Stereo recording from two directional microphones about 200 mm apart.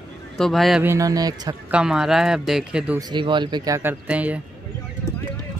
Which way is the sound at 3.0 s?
20° right (ahead or behind).